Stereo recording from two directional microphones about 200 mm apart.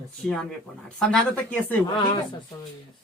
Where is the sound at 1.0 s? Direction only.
5° left (ahead or behind).